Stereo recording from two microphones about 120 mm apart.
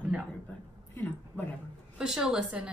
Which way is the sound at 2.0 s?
5° right (ahead or behind).